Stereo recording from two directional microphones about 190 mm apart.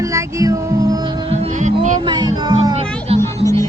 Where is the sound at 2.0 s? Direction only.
20° right (ahead or behind).